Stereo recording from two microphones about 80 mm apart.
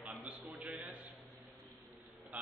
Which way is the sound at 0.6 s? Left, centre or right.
Centre.